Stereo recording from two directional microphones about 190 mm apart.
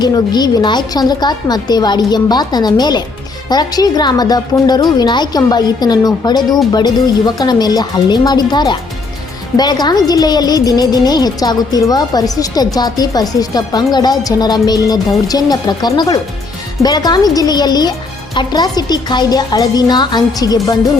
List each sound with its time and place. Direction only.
0.0 s a woman's voice: 20° left (ahead or behind)